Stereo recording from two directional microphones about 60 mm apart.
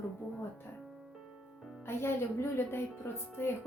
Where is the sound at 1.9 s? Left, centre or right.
Left.